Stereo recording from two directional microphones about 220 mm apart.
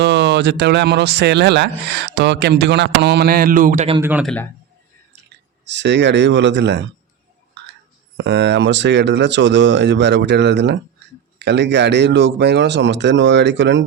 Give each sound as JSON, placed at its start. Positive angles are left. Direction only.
{"t": 0.0, "sound": "speech", "side_deg": -50}
{"t": 4.0, "sound": "a man's voice", "side_deg": -5}
{"t": 5.6, "sound": "speech", "side_deg": -55}
{"t": 7.6, "sound": "whispering", "side_deg": -50}
{"t": 8.2, "sound": "speech", "side_deg": -55}